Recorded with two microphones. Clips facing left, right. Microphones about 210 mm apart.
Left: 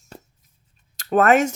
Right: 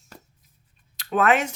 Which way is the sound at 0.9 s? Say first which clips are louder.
Left 5 dB; 45° left (ahead or behind).